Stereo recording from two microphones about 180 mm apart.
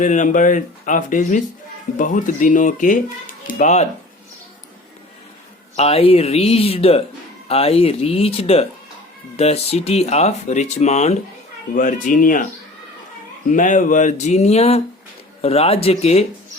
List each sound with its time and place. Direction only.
0.0 s speech: 45° left (ahead or behind)
5.7 s speech: 35° left (ahead or behind)
13.5 s speech: 45° left (ahead or behind)